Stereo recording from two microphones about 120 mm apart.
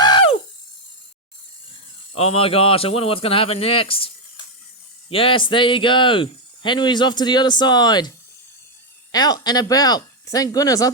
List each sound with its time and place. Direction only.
0.0 s toothbrush: 40° left (ahead or behind)
2.1 s speech: 55° left (ahead or behind); by 8.1 s 35° left (ahead or behind)
9.1 s speech: 35° left (ahead or behind)